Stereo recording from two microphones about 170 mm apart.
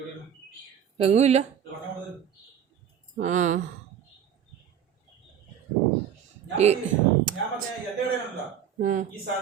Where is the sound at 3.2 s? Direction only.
45° right (ahead or behind).